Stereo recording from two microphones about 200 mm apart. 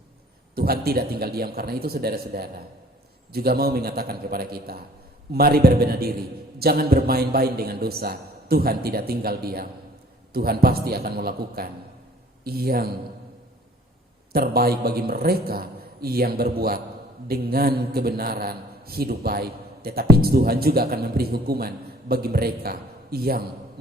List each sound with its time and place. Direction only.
0.5 s a man's voice: 50° right (ahead or behind)
14.3 s a man's voice: 50° right (ahead or behind)